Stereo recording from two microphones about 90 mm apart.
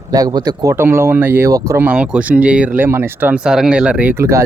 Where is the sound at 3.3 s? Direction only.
10° right (ahead or behind).